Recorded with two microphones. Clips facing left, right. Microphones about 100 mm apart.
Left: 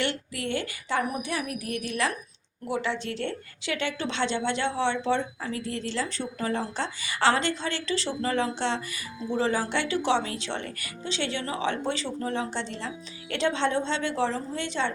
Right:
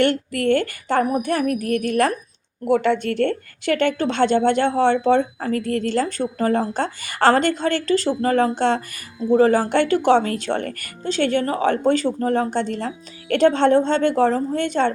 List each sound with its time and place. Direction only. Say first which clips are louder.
0.0 s a woman's voice: right 11 dB; 55° right (ahead or behind)